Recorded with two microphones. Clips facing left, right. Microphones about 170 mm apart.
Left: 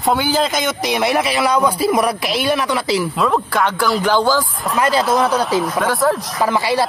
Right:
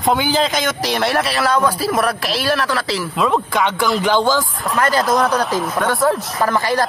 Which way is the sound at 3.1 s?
Centre (ahead or behind).